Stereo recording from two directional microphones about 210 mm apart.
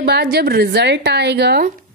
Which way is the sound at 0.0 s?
50° right (ahead or behind).